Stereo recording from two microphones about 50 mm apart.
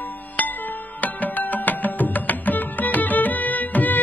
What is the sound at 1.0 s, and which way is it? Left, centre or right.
Music, left.